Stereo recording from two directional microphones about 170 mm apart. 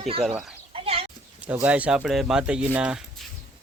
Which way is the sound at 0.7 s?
35° right (ahead or behind).